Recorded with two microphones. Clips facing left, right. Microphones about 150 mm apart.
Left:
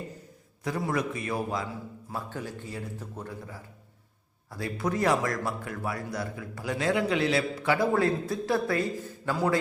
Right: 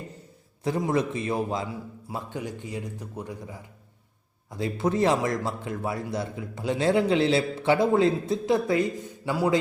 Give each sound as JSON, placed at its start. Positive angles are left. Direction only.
{"t": 0.8, "sound": "a man's voice", "side_deg": -25}